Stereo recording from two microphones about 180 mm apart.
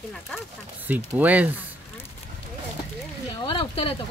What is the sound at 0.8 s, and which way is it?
Speech, 10° right (ahead or behind).